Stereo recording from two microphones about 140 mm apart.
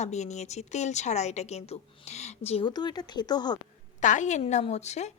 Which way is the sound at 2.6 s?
30° left (ahead or behind).